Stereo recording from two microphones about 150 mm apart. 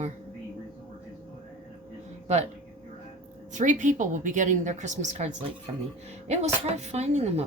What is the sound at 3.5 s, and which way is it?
A woman's voice, 55° right (ahead or behind).